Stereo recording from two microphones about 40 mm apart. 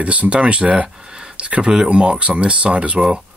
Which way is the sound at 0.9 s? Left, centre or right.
Centre.